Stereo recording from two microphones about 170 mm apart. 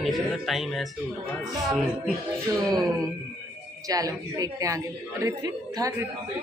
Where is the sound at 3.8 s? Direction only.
20° right (ahead or behind).